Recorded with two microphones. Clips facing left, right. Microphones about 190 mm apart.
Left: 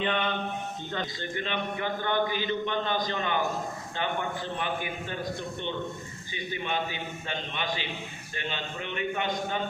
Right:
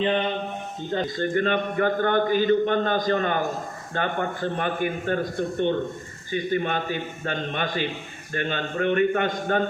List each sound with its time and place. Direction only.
0.0 s a man's voice: 35° right (ahead or behind)
1.0 s a man's voice: 50° right (ahead or behind)